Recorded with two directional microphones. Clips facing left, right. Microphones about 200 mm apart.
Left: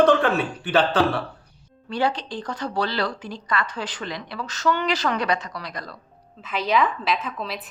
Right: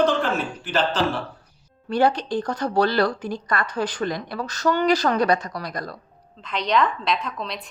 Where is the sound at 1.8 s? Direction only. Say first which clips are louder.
Right 4 dB; 45° right (ahead or behind).